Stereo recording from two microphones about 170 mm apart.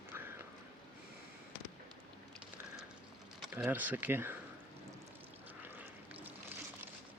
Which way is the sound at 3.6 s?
10° right (ahead or behind).